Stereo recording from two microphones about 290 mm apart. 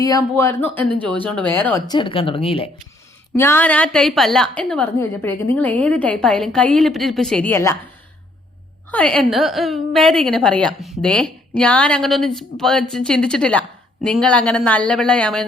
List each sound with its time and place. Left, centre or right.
0.0 s a woman's voice: centre
0.9 s speech: centre
1.5 s a woman's voice: centre
3.3 s a woman's voice: centre
8.9 s a woman's voice: centre